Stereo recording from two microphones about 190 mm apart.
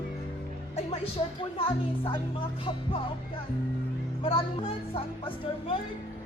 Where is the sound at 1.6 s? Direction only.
30° left (ahead or behind).